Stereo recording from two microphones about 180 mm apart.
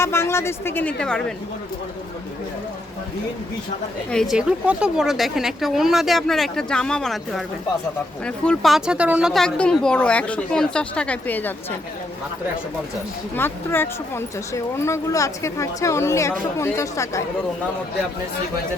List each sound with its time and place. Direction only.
0.0 s speech: 15° left (ahead or behind)
4.1 s a woman's voice: centre (ahead or behind)
13.3 s speech: 10° left (ahead or behind)